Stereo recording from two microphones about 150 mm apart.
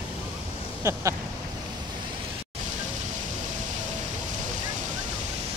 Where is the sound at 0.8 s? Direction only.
20° right (ahead or behind).